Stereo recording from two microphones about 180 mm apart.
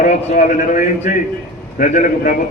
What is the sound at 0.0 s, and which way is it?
Speech, 45° left (ahead or behind).